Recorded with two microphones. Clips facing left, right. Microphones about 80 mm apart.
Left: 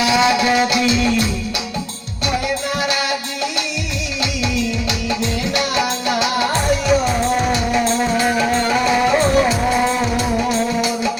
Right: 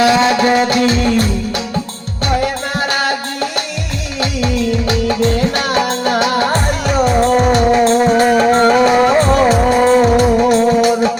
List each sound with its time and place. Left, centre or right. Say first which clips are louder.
0.0 s music: right 4 dB; right
2.4 s music: right 3 dB; right